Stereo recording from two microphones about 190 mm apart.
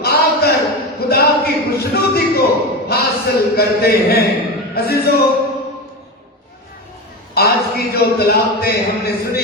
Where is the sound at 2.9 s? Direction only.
55° left (ahead or behind).